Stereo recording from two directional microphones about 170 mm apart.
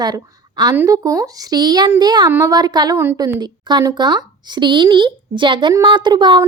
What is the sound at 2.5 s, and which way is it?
A woman's voice, 25° right (ahead or behind).